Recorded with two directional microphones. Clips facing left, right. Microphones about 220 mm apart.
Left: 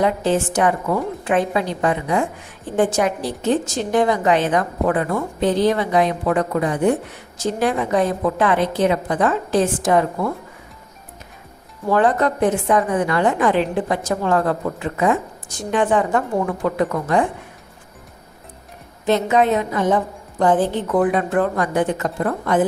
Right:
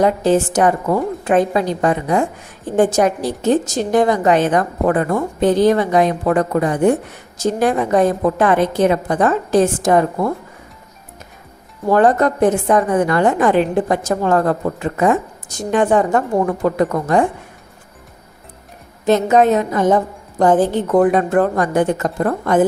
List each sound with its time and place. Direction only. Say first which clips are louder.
0.0 s a woman's voice: right 4 dB; 40° right (ahead or behind)
11.9 s a woman's voice: right 4 dB; 45° right (ahead or behind)
19.0 s a woman's voice: right 4 dB; 45° right (ahead or behind)